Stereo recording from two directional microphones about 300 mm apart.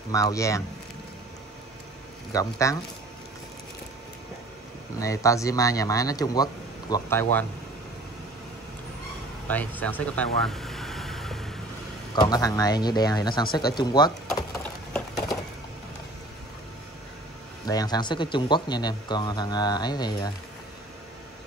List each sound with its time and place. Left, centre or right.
0.1 s speech: centre
2.3 s speech: centre
4.9 s speech: centre
9.5 s vehicle: centre
12.2 s speech: centre
17.6 s speech: centre